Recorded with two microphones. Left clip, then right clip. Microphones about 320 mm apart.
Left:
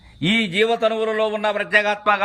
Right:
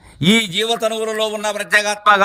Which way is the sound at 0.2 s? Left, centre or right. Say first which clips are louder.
Right 4 dB; right.